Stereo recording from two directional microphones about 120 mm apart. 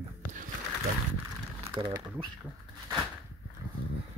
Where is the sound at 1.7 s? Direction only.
45° right (ahead or behind).